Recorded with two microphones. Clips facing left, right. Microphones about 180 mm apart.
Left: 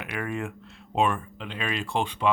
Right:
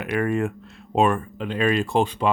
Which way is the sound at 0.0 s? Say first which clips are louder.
Right 9 dB; 45° right (ahead or behind).